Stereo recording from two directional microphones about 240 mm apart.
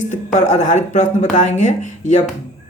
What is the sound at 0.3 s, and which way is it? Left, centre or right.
Speech, left.